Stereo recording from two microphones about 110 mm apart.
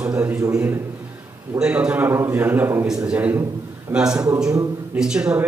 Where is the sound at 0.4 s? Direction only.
25° right (ahead or behind).